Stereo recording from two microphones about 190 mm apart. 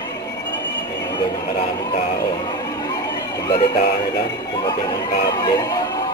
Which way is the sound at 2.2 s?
20° left (ahead or behind).